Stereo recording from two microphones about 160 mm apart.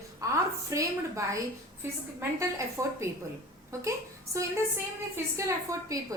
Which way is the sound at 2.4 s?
20° right (ahead or behind).